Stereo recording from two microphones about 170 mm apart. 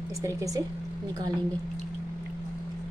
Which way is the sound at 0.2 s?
20° right (ahead or behind).